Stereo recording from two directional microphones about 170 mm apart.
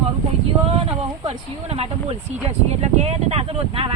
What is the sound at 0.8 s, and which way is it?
Speech, 35° right (ahead or behind).